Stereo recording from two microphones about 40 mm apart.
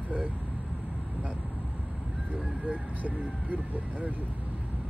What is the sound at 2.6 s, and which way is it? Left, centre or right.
Speech, right.